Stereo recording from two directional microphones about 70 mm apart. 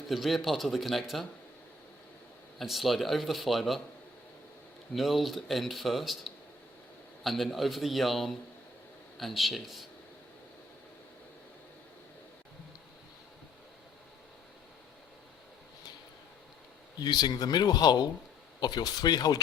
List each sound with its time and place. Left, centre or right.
0.1 s speech: centre
2.6 s speech: centre
4.9 s speech: centre
17.0 s speech: left